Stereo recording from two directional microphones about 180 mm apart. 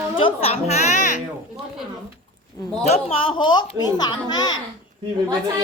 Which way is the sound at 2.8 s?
35° left (ahead or behind).